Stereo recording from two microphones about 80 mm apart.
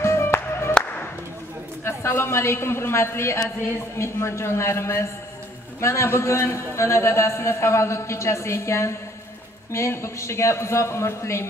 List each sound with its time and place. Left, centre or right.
0.0 s music: left
1.9 s a man's voice: left